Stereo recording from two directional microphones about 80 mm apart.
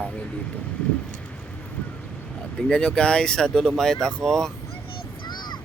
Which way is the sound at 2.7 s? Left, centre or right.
Centre.